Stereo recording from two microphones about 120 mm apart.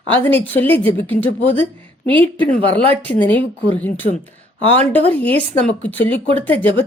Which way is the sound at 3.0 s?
15° left (ahead or behind).